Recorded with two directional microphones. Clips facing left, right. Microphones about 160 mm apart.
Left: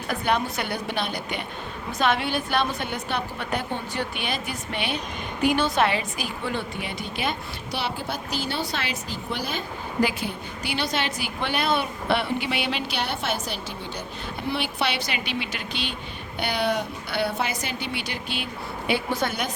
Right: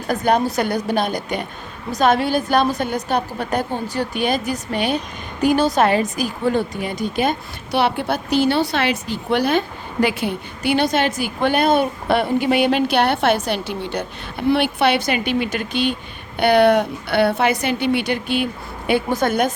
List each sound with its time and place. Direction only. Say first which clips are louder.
0.1 s a woman's voice: right 7 dB; 40° right (ahead or behind); by 14.0 s 70° right (ahead or behind)
14.5 s a woman's voice: right 10 dB; 55° right (ahead or behind)
16.4 s a woman's voice: right 12 dB; 60° right (ahead or behind)